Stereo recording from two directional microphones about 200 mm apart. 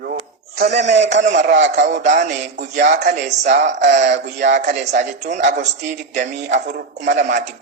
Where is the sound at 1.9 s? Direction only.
35° right (ahead or behind).